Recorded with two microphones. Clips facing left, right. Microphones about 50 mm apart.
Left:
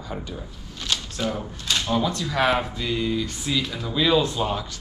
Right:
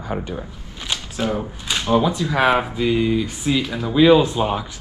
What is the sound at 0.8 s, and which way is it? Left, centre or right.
Speech, centre.